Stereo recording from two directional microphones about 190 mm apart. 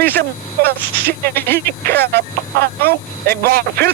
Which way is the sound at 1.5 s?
60° right (ahead or behind).